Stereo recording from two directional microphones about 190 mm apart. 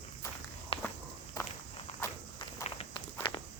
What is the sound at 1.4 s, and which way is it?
Walk, 20° left (ahead or behind).